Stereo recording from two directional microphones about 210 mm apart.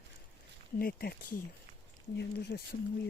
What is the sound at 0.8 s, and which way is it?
Speech, 45° left (ahead or behind).